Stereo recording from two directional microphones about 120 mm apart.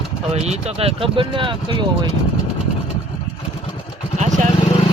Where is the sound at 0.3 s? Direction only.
60° right (ahead or behind).